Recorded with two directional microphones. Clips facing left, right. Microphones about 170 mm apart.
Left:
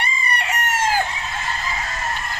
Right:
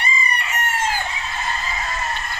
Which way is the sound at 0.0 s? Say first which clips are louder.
Even; 70° left (ahead or behind).